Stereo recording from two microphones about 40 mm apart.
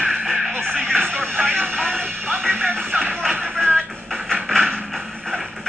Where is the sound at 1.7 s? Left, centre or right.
Right.